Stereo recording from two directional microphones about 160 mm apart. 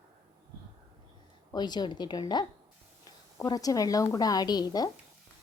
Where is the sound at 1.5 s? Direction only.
25° left (ahead or behind).